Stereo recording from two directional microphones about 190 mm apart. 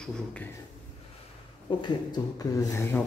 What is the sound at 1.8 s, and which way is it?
Speech, 20° left (ahead or behind).